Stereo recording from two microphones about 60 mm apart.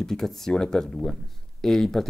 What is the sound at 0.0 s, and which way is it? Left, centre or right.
Speech, centre.